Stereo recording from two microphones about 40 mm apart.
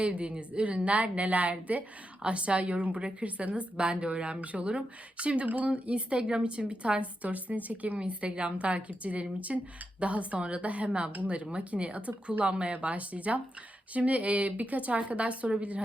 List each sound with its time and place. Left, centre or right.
0.0 s a woman's voice: right